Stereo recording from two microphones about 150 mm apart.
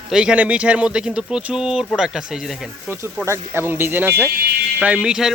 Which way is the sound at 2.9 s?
15° right (ahead or behind).